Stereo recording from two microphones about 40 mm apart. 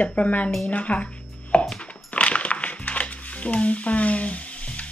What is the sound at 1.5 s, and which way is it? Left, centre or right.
Music, left.